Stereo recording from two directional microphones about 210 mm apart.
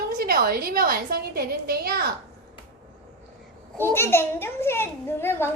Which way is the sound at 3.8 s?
10° left (ahead or behind).